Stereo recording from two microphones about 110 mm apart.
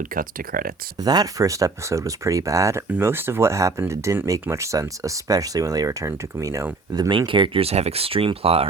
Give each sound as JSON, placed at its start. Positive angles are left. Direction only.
{"t": 0.9, "sound": "speech", "side_deg": -35}
{"t": 7.1, "sound": "speech", "side_deg": -50}